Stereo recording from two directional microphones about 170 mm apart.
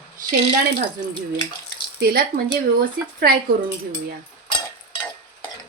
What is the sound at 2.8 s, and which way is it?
Speech, 60° right (ahead or behind).